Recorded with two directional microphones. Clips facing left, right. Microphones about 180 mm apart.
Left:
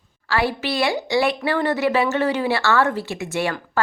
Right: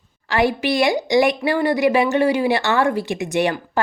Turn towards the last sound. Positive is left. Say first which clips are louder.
# right 3 dB
turn(degrees=-20)  # may be behind; listen again after turning